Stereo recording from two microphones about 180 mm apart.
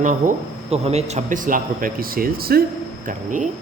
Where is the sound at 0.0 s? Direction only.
45° right (ahead or behind).